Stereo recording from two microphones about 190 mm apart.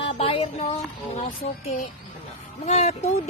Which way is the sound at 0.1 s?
30° left (ahead or behind).